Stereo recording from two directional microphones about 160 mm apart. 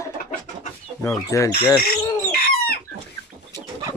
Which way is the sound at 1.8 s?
70° left (ahead or behind).